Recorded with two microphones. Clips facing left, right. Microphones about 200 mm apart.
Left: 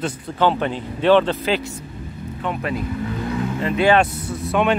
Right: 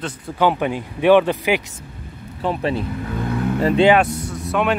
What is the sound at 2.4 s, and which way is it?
Speech, 30° right (ahead or behind).